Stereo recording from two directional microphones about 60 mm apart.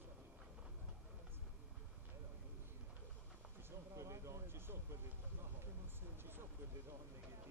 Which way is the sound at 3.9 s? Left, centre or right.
Right.